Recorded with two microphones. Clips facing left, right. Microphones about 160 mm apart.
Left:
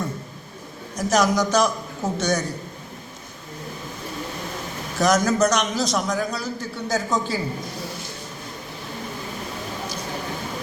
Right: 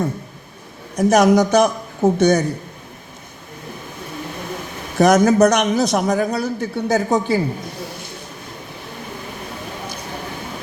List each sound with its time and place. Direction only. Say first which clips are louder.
0.9 s a man's voice: right 7 dB; 60° right (ahead or behind)
4.9 s a man's voice: right 7 dB; 60° right (ahead or behind)